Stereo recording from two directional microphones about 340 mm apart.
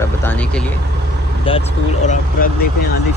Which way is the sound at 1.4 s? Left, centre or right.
Centre.